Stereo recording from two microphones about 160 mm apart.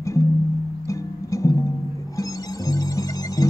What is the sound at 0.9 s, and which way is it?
Music, 20° left (ahead or behind).